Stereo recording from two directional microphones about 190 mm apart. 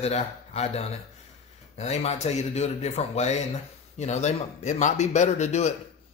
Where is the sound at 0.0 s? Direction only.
35° left (ahead or behind).